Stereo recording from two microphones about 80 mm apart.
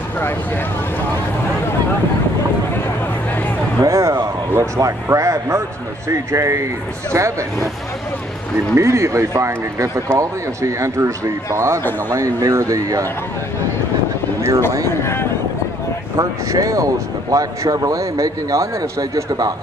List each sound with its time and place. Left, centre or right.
3.8 s a sound: right
4.2 s a man's voice: right
8.7 s speech: right
16.2 s speech: right